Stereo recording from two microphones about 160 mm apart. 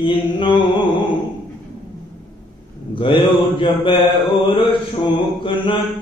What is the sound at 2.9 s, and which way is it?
Mantra, 30° left (ahead or behind).